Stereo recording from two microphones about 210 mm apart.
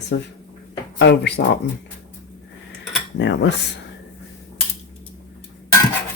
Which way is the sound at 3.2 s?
60° left (ahead or behind).